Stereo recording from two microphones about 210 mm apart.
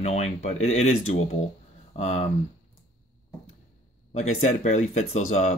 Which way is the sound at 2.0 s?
35° left (ahead or behind).